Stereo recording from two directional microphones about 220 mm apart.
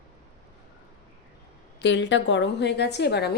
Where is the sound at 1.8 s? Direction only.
55° left (ahead or behind).